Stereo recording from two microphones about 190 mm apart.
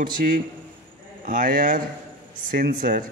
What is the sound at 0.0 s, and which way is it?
Speech, 45° right (ahead or behind).